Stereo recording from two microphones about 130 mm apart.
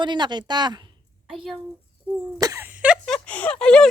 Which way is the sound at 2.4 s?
25° right (ahead or behind).